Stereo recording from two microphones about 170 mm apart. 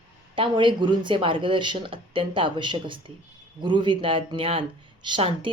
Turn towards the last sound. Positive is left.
turn(degrees=-30)  # may be behind; listen again after turning